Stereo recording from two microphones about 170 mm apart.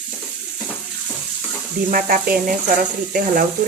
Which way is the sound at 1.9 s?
55° right (ahead or behind).